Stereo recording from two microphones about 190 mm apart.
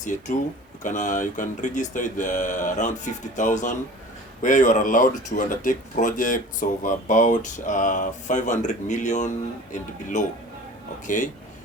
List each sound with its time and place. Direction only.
0.0 s speech: 40° left (ahead or behind)